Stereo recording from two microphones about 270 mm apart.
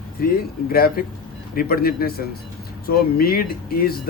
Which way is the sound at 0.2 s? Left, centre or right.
Left.